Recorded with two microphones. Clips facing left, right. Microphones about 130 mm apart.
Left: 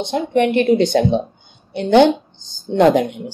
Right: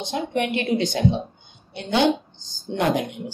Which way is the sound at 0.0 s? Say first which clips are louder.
Left 8 dB; 55° left (ahead or behind).